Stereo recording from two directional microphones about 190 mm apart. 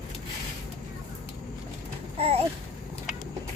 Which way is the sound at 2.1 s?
30° right (ahead or behind).